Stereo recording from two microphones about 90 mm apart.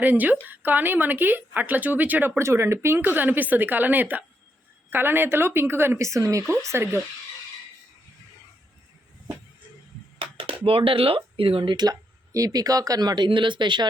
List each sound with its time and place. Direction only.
0.0 s speech: 20° right (ahead or behind)
2.4 s speech: 30° right (ahead or behind)
10.2 s speech: 90° right; by 11.9 s 65° right (ahead or behind)
11.9 s speech: 40° right (ahead or behind); by 13.8 s 60° right (ahead or behind)